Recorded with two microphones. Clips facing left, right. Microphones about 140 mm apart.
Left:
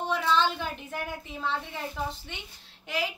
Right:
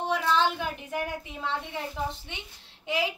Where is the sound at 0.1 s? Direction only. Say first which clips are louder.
Even; 10° right (ahead or behind).